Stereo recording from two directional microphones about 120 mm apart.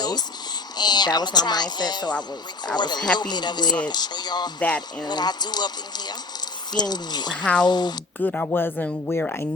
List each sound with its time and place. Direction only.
0.0 s a sound: 35° left (ahead or behind)
0.8 s speech: 35° left (ahead or behind)
4.6 s speech: 10° left (ahead or behind)
5.0 s speech: 35° left (ahead or behind)
8.2 s speech: 10° left (ahead or behind)